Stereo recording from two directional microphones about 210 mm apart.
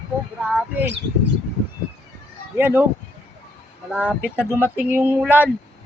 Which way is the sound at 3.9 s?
5° left (ahead or behind).